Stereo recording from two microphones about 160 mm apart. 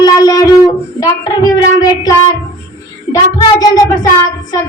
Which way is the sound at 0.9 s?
25° left (ahead or behind).